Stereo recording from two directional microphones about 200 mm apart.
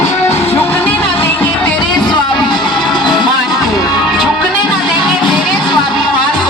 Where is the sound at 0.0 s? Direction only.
15° left (ahead or behind).